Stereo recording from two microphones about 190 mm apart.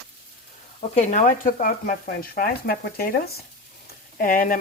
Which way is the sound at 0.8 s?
35° left (ahead or behind).